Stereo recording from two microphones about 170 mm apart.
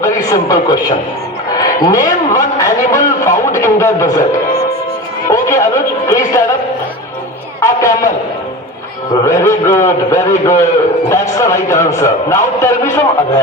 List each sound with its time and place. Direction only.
0.0 s a man's voice: 20° left (ahead or behind)
7.6 s a man's voice: 20° left (ahead or behind)
9.2 s a man's voice: 15° left (ahead or behind)